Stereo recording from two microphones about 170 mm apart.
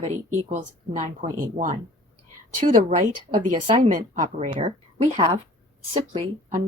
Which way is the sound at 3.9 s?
45° right (ahead or behind).